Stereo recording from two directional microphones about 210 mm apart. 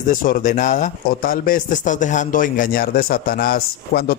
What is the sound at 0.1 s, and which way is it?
Speech, 40° left (ahead or behind).